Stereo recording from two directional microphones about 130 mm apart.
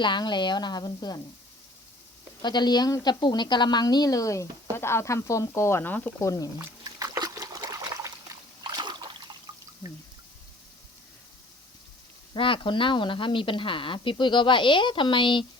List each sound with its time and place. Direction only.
0.0 s a woman's voice: 35° left (ahead or behind)
2.4 s a woman's voice: 35° left (ahead or behind)
6.8 s trickle: 30° right (ahead or behind)
8.6 s a sound: 35° right (ahead or behind)
12.3 s a woman's voice: 40° left (ahead or behind)